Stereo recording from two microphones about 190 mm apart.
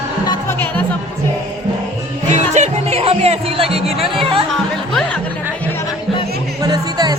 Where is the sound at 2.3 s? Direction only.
35° right (ahead or behind).